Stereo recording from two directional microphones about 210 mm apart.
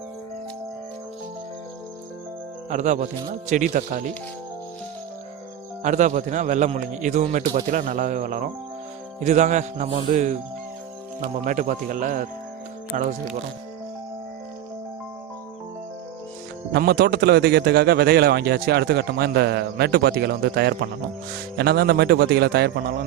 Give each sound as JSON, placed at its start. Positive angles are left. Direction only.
{"t": 2.6, "sound": "a man's voice", "side_deg": -35}
{"t": 5.8, "sound": "a man's voice", "side_deg": -35}
{"t": 16.7, "sound": "a man's voice", "side_deg": -50}